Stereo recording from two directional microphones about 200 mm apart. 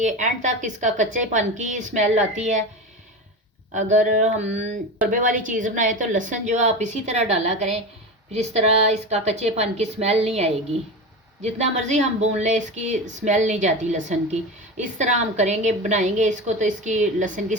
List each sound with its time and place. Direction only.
0.0 s a woman's voice: 40° right (ahead or behind)
3.8 s a woman's voice: 35° right (ahead or behind)